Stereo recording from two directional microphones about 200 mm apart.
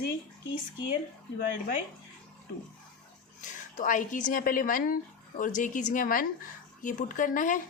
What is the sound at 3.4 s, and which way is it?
Speech, 40° left (ahead or behind).